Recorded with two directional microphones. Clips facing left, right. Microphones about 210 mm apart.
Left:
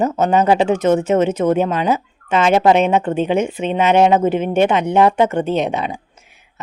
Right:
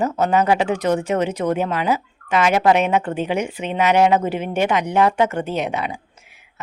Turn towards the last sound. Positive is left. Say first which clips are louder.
# left 4 dB
turn(degrees=25)  # may be behind; listen again after turning